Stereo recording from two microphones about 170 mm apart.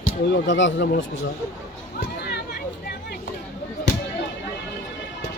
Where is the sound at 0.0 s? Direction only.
90° left.